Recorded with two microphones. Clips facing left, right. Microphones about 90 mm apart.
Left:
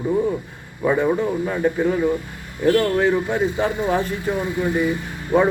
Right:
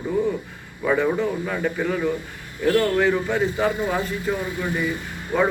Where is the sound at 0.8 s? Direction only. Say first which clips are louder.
Left 2 dB; 20° left (ahead or behind).